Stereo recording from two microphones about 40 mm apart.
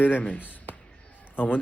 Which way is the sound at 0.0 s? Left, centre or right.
Left.